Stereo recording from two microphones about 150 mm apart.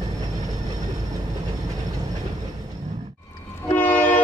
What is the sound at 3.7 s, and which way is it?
Train, 10° left (ahead or behind).